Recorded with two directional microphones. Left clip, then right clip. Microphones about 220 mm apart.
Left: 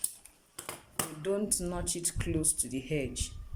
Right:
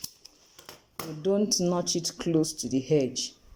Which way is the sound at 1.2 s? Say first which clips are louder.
Right 9 dB; 10° right (ahead or behind).